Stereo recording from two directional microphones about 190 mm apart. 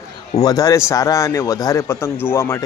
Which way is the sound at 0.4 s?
15° left (ahead or behind).